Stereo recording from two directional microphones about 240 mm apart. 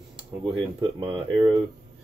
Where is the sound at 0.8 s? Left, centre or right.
Right.